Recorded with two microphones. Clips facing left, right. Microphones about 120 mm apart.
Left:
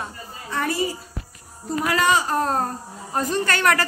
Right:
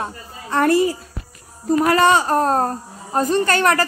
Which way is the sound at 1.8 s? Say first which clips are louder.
Right 5 dB; 40° right (ahead or behind).